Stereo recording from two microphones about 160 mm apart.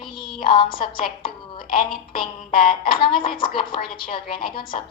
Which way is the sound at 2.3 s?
60° left (ahead or behind).